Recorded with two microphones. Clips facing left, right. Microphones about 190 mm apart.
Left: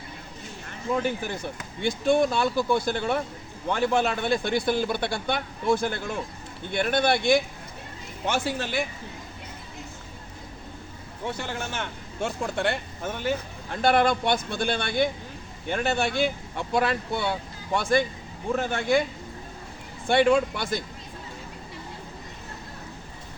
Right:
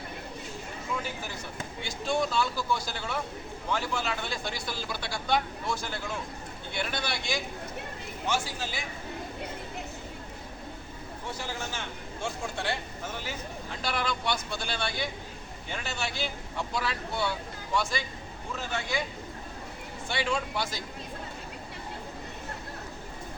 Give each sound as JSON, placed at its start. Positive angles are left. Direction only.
{"t": 0.9, "sound": "speech", "side_deg": 60}
{"t": 11.3, "sound": "speech", "side_deg": 60}
{"t": 20.1, "sound": "speech", "side_deg": 55}